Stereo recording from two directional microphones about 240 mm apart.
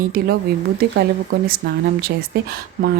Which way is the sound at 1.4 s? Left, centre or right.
Right.